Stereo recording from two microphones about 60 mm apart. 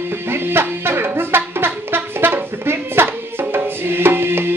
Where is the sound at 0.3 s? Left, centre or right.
Right.